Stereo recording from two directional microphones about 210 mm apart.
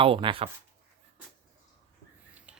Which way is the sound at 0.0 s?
25° right (ahead or behind).